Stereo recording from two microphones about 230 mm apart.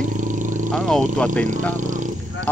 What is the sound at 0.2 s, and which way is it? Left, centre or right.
Vehicle, right.